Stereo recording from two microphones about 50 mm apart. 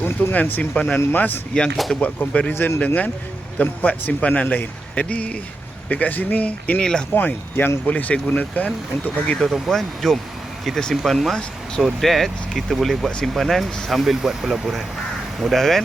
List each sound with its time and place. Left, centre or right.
0.0 s speech: left
1.7 s speech: centre
2.0 s a man's voice: left
2.5 s speech: left
2.8 s a man's voice: left
6.7 s speech: centre
7.1 s speech: left
7.9 s a man's voice: left
9.6 s speech: centre